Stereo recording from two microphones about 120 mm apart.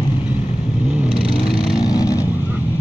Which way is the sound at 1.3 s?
30° left (ahead or behind).